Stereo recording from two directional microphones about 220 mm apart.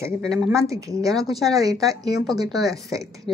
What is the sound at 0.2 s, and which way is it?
Speech, centre (ahead or behind).